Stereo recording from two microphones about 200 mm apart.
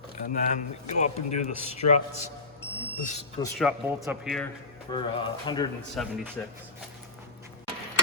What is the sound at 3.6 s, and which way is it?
Speech, 5° left (ahead or behind).